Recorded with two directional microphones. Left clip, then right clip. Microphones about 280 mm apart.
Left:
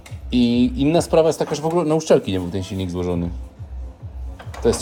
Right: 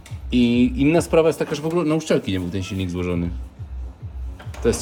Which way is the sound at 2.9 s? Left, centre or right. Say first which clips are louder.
Left 2 dB; centre.